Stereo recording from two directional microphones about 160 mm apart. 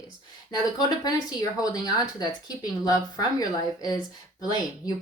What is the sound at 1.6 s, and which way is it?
Speech, 25° left (ahead or behind).